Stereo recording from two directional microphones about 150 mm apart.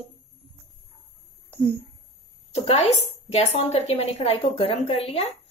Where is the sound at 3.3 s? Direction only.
45° left (ahead or behind).